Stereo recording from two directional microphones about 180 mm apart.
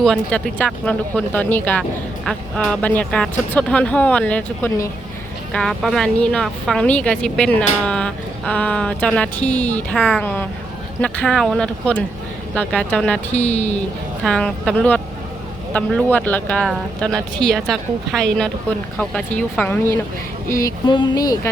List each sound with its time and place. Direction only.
0.0 s a woman's voice: 5° left (ahead or behind)
13.5 s speech: 40° left (ahead or behind)
14.3 s a woman's voice: 5° left (ahead or behind); by 21.5 s 20° left (ahead or behind)